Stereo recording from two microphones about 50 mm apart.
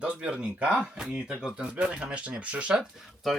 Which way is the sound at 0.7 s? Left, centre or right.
Centre.